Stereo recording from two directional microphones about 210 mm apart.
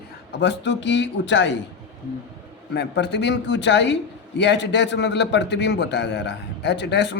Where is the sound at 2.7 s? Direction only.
55° left (ahead or behind).